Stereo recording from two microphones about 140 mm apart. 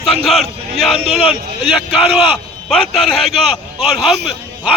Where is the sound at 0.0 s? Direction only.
Centre (ahead or behind).